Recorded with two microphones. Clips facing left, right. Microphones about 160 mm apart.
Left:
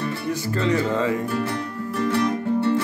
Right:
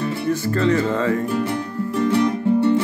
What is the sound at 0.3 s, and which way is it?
Music, 15° left (ahead or behind).